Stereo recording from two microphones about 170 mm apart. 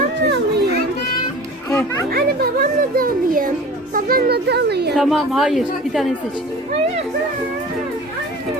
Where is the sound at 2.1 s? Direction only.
60° right (ahead or behind).